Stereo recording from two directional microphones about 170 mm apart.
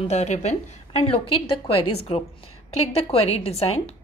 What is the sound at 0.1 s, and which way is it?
A woman's voice, 40° left (ahead or behind).